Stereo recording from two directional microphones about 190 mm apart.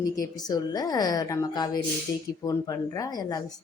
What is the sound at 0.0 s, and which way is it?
Speech, 20° left (ahead or behind).